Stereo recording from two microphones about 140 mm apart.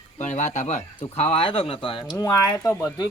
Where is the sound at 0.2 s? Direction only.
60° left (ahead or behind); by 2.0 s 40° left (ahead or behind).